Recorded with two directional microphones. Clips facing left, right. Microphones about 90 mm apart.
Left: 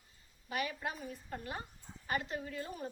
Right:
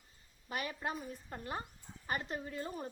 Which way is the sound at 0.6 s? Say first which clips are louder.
Right 1 dB; 30° right (ahead or behind).